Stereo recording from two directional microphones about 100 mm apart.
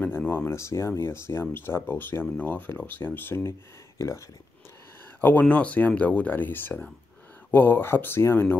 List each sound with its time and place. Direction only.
0.0 s speech: 20° left (ahead or behind)
5.2 s speech: 15° left (ahead or behind)